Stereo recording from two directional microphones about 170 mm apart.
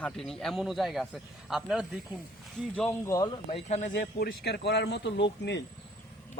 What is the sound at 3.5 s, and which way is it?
A man's voice, 45° left (ahead or behind).